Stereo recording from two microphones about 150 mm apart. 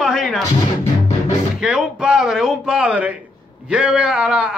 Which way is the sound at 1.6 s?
5° right (ahead or behind).